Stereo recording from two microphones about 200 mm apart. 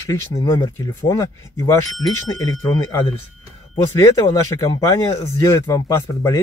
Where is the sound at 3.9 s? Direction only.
15° left (ahead or behind).